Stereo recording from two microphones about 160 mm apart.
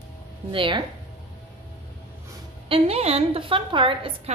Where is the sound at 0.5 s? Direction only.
30° right (ahead or behind).